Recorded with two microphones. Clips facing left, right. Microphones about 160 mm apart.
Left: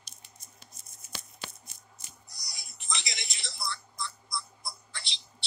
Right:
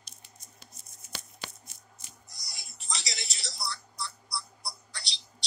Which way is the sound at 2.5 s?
25° right (ahead or behind).